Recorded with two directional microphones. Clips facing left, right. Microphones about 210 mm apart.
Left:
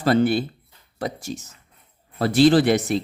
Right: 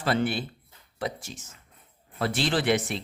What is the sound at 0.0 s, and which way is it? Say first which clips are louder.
Speech: left 8 dB; 40° left (ahead or behind).